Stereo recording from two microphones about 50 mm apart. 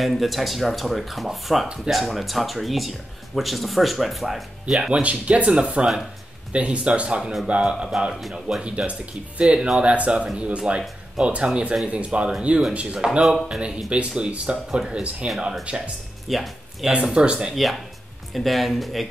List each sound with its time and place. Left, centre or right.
0.0 s speech: centre
5.0 s speech: right; by 8.6 s centre
8.6 s speech: right
16.3 s speech: centre
16.9 s speech: right
17.6 s speech: centre